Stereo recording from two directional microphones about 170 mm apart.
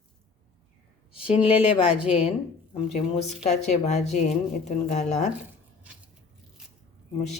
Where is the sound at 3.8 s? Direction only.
40° left (ahead or behind).